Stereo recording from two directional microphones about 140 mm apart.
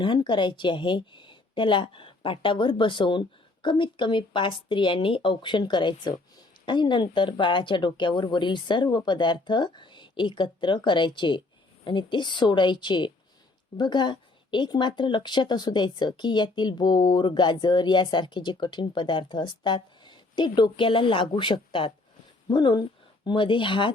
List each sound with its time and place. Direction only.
0.0 s a woman's voice: 35° left (ahead or behind)